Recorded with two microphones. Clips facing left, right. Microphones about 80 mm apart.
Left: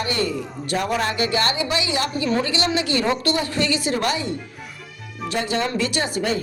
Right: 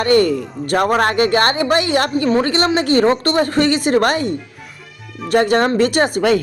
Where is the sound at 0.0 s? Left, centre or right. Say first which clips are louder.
Right 10 dB; right.